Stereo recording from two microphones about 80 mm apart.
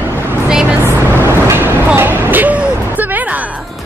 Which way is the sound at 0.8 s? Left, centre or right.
Right.